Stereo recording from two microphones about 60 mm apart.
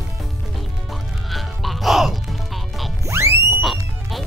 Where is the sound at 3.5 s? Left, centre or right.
Centre.